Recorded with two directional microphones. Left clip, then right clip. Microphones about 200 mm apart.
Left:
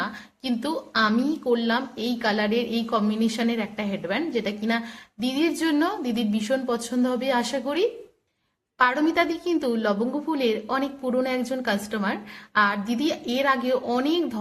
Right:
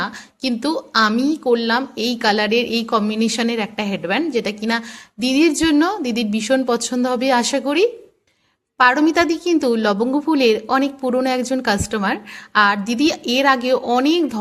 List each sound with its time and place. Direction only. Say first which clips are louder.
0.0 s a woman's voice: right 7 dB; 35° right (ahead or behind)